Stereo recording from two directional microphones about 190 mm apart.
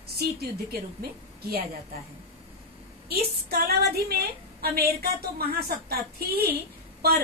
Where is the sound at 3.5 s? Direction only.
55° right (ahead or behind).